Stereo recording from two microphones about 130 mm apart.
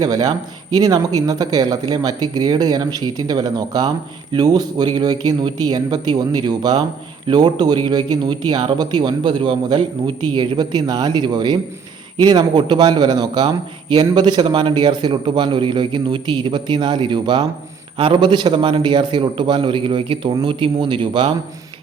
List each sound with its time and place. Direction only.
0.0 s speech: 30° right (ahead or behind)